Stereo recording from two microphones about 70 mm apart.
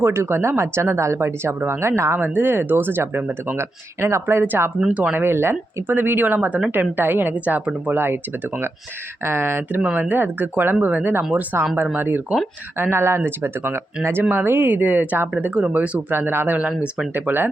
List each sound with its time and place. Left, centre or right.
0.0 s speech: right
2.1 s speech: right
7.9 s speech: right
9.8 s speech: right
16.1 s speech: right
16.6 s speech: centre